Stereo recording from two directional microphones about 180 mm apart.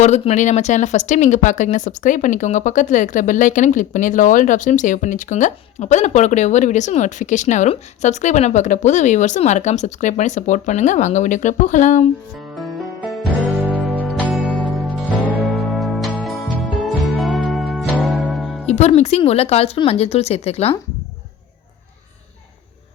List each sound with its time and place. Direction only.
0.0 s speech: 40° left (ahead or behind)
12.5 s music: centre (ahead or behind)
14.3 s music: centre (ahead or behind)
18.6 s speech: 35° left (ahead or behind)